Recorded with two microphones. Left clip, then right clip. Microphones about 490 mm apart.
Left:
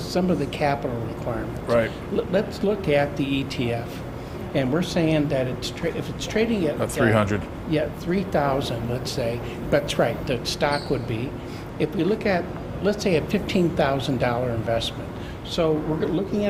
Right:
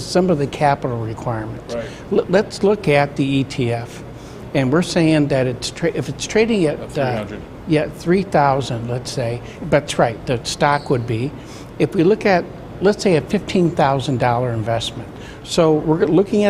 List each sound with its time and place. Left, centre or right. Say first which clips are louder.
0.1 s speech: right 7 dB; right
15.5 s speech: right 8 dB; right